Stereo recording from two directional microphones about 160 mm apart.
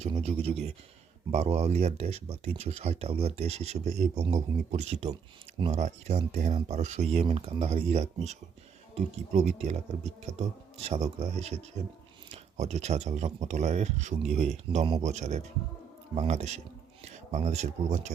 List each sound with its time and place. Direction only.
0.2 s speech: 40° right (ahead or behind)